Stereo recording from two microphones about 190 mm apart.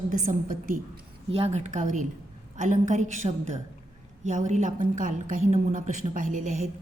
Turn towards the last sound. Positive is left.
turn(degrees=-40)  # may be behind; listen again after turning